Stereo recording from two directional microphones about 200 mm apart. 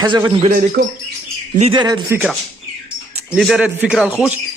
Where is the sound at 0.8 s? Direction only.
55° right (ahead or behind).